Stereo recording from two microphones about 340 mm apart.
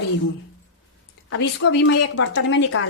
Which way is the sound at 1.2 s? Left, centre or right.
Left.